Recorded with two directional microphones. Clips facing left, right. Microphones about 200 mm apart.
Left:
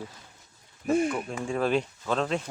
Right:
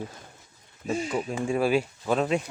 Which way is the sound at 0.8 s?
55° left (ahead or behind).